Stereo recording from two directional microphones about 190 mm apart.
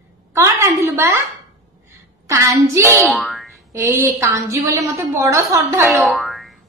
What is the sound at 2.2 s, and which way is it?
Speech, 15° right (ahead or behind).